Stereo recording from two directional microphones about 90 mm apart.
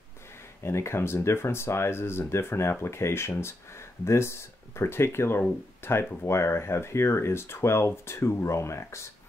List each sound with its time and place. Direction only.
0.6 s speech: 30° left (ahead or behind)